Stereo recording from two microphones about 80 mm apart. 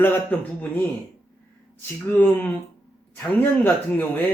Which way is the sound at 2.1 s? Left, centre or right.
Left.